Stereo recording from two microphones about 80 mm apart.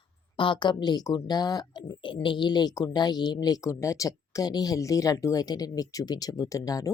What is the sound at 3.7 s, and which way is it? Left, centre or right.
Speech, left.